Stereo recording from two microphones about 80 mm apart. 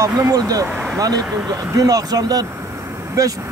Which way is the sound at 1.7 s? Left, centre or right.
Right.